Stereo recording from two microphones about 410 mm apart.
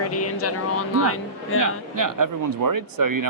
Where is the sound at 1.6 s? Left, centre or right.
Right.